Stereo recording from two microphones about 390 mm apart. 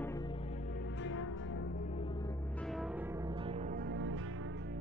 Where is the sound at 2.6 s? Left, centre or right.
Centre.